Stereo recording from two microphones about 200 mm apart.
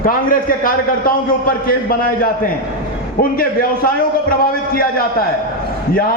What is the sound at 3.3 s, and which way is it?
A man's voice, 45° left (ahead or behind).